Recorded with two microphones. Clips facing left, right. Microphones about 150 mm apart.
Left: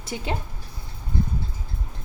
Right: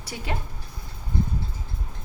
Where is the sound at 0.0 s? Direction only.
25° left (ahead or behind).